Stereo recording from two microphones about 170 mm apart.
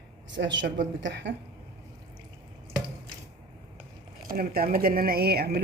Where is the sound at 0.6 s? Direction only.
90° right.